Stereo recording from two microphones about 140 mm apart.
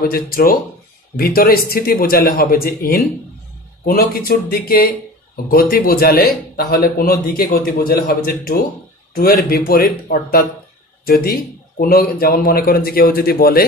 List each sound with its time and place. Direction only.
0.0 s a man's voice: 90° left
4.1 s a man's voice: 90° left